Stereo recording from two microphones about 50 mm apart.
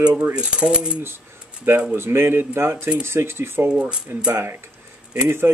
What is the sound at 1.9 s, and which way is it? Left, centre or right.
Speech, right.